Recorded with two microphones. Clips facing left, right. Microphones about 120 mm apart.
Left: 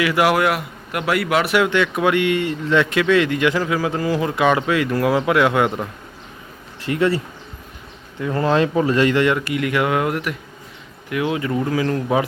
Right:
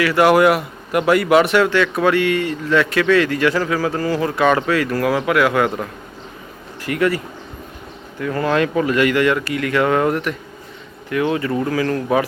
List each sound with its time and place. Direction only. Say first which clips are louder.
0.2 s a man's voice: right 7 dB; centre (ahead or behind)
1.5 s speech: right 2 dB; 15° left (ahead or behind)
8.2 s speech: even; 20° left (ahead or behind)